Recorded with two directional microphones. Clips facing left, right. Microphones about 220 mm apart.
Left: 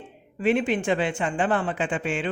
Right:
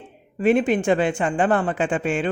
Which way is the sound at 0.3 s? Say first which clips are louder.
Right 4 dB; 45° right (ahead or behind).